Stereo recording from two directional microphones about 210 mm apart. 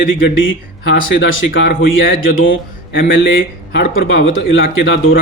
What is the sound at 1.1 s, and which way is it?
Speech, 65° left (ahead or behind).